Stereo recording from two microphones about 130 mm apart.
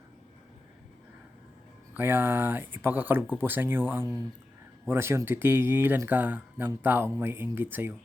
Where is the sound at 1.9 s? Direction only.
15° right (ahead or behind).